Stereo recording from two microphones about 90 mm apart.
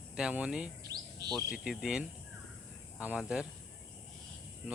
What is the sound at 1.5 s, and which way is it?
Speech, 5° right (ahead or behind).